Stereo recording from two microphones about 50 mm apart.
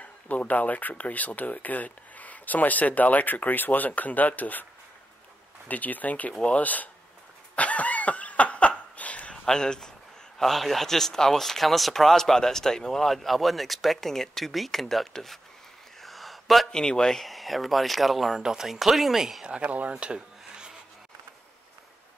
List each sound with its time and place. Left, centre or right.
0.0 s speech: left
5.7 s speech: left
7.5 s cough: left
9.5 s speech: centre
16.0 s a sound: centre
16.7 s speech: centre
17.2 s speech: centre
19.4 s speech: centre
19.9 s dishes: right